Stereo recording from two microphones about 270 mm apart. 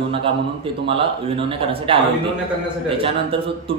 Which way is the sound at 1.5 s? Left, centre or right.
Centre.